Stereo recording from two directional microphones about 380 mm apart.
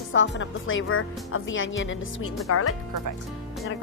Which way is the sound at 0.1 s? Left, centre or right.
Left.